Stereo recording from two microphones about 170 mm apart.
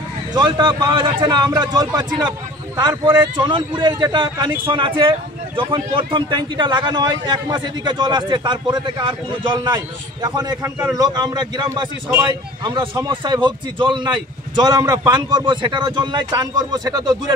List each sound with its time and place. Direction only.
0.3 s a man's voice: 25° right (ahead or behind)